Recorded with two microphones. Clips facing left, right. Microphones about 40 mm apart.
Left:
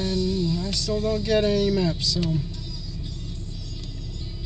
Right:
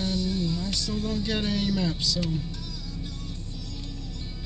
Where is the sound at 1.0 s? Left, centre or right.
Left.